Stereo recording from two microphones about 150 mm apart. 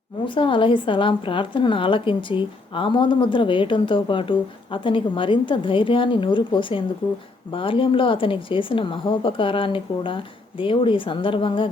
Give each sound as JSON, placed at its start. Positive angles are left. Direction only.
{"t": 0.3, "sound": "a woman's voice", "side_deg": 35}